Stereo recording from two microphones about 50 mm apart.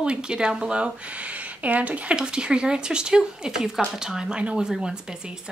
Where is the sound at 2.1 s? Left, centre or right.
Centre.